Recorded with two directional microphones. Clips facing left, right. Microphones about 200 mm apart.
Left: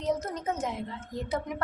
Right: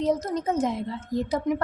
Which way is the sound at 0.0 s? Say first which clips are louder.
Right 5 dB; 35° right (ahead or behind).